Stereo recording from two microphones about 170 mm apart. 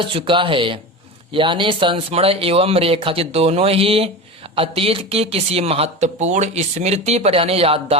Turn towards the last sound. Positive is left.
turn(degrees=-35)  # may be behind; listen again after turning